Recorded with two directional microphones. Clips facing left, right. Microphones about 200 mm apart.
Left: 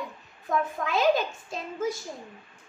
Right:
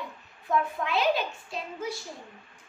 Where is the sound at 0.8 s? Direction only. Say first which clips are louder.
Left 3 dB; 45° left (ahead or behind).